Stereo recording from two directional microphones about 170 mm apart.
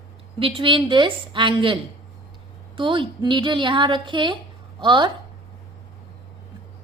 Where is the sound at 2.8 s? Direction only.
30° right (ahead or behind).